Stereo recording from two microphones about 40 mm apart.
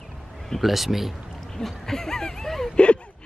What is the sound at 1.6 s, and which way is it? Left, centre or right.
Speech, centre.